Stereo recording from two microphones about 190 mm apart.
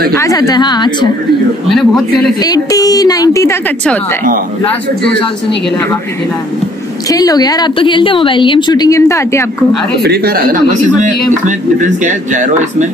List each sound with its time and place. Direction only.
0.2 s a woman's voice: 20° left (ahead or behind)
2.4 s a woman's voice: 20° left (ahead or behind)
7.1 s a woman's voice: 20° left (ahead or behind)
10.0 s speech: 55° right (ahead or behind)